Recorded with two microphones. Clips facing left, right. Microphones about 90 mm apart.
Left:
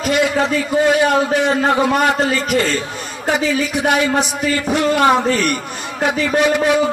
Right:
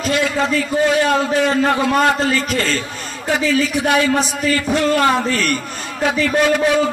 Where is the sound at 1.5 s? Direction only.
15° left (ahead or behind).